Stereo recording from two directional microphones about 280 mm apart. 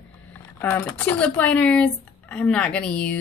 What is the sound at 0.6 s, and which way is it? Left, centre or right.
Speech, centre.